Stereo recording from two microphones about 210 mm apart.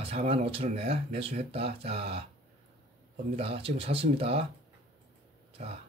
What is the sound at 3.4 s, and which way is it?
Speech, 25° right (ahead or behind).